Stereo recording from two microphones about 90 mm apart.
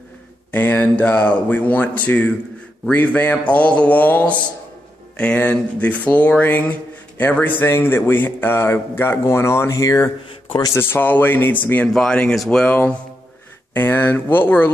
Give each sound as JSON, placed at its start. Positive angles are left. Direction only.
{"t": 0.5, "sound": "a man's voice", "side_deg": 20}
{"t": 10.8, "sound": "a man's voice", "side_deg": 20}
{"t": 11.9, "sound": "a man's voice", "side_deg": 10}